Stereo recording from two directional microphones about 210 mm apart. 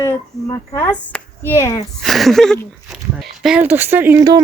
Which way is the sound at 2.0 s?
Centre (ahead or behind).